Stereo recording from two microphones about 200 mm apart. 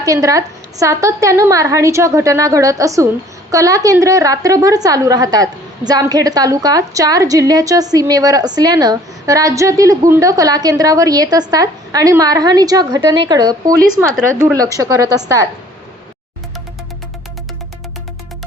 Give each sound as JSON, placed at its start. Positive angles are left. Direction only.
{"t": 0.0, "sound": "a woman's voice", "side_deg": -15}